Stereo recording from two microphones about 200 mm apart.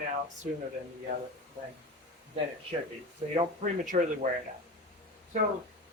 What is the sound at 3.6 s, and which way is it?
Speech, 40° right (ahead or behind).